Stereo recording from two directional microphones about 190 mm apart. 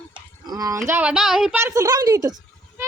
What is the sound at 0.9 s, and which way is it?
A woman's voice, 5° right (ahead or behind).